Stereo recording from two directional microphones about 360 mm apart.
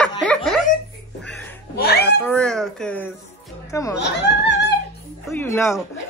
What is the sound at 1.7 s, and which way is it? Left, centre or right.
Speech, left.